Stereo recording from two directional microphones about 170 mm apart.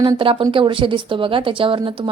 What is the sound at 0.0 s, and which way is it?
Speech, 30° right (ahead or behind).